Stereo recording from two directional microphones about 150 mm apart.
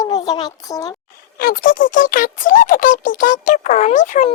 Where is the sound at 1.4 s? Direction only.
70° left (ahead or behind).